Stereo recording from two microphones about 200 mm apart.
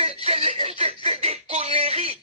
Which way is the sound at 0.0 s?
30° right (ahead or behind).